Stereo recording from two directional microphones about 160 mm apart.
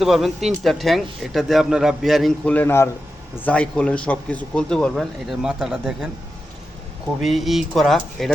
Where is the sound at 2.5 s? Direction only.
15° left (ahead or behind); by 6.0 s 5° right (ahead or behind).